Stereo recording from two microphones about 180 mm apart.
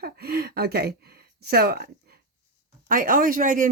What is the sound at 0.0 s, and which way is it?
Speech, 60° right (ahead or behind).